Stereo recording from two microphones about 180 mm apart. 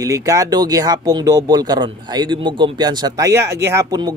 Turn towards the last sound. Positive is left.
turn(degrees=-20)  # may be behind; listen again after turning